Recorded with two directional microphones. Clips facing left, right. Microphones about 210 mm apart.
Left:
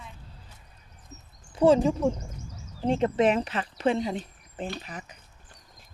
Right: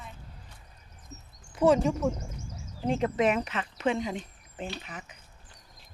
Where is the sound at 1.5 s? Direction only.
30° left (ahead or behind).